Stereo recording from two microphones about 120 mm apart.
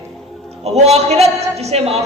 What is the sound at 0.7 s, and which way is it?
A woman's voice, 65° right (ahead or behind).